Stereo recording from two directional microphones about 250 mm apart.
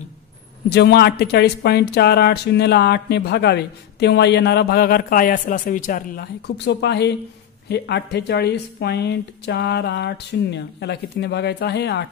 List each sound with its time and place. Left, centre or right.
0.7 s speech: left